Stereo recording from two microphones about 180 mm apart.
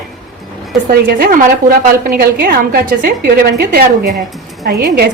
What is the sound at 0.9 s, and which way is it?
A woman's voice, 55° right (ahead or behind).